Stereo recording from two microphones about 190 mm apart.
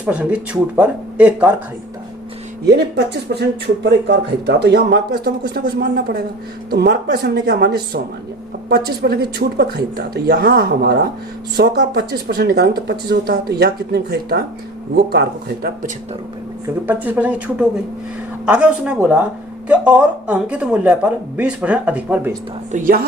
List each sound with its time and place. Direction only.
0.0 s speech: 5° right (ahead or behind)
2.6 s speech: 60° right (ahead or behind)
16.6 s speech: 10° right (ahead or behind)
22.7 s speech: 50° right (ahead or behind)